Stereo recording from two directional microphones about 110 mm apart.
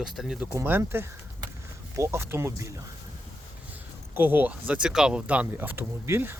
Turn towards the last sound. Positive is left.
turn(degrees=-20)  # may be behind; listen again after turning